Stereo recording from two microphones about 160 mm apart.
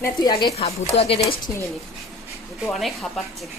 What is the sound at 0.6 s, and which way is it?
Speech, 40° left (ahead or behind).